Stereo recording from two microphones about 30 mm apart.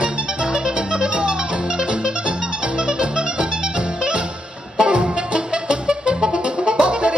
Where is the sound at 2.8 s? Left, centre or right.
Right.